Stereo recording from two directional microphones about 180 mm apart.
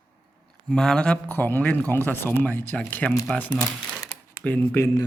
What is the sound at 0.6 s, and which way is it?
Speech, 5° left (ahead or behind).